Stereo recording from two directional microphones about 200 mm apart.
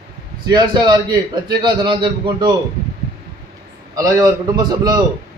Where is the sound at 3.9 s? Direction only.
20° right (ahead or behind).